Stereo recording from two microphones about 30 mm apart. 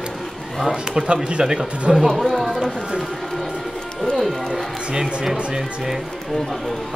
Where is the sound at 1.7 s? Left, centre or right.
Right.